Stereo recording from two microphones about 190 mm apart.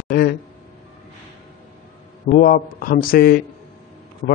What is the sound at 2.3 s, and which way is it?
A man's voice, 45° left (ahead or behind).